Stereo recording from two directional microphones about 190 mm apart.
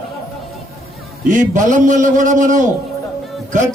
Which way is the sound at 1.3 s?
40° right (ahead or behind).